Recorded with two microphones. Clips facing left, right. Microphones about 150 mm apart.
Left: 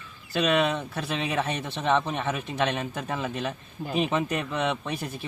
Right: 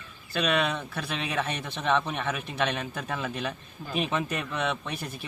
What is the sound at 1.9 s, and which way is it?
Speech, 30° left (ahead or behind).